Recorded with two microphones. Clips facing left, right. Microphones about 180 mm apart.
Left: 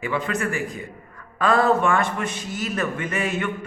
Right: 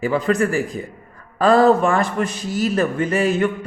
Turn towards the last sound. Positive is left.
turn(degrees=-35)  # may be behind; listen again after turning